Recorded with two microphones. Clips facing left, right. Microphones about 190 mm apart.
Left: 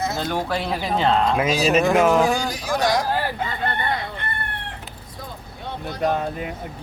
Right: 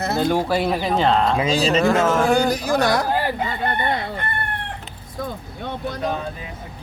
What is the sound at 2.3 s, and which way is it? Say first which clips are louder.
Speech: right 6 dB; 60° right (ahead or behind).